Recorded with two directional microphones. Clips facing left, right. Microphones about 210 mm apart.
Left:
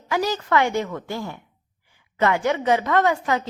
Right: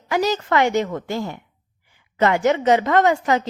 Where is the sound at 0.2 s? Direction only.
20° right (ahead or behind).